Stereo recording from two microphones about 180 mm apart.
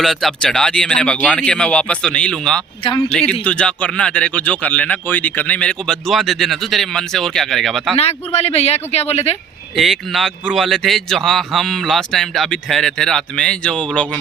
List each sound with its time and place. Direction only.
0.0 s speech: centre (ahead or behind)
2.8 s speech: 30° left (ahead or behind)
3.1 s speech: 5° left (ahead or behind)
7.9 s speech: 35° left (ahead or behind)
9.7 s speech: centre (ahead or behind)